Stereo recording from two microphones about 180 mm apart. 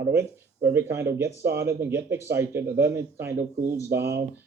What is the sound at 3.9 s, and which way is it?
Speech, 60° right (ahead or behind).